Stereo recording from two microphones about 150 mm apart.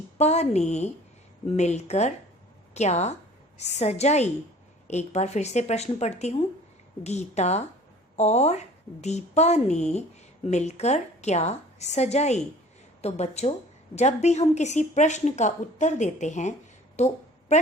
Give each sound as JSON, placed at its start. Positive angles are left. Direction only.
{"t": 0.2, "sound": "a woman's voice", "side_deg": 50}